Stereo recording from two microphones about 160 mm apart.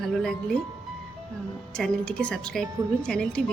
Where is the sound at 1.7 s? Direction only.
5° left (ahead or behind).